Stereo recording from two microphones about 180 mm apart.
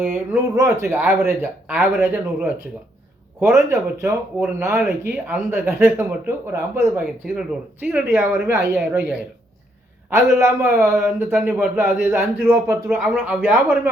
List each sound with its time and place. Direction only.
0.0 s speech: 10° right (ahead or behind)
3.7 s speech: 15° right (ahead or behind)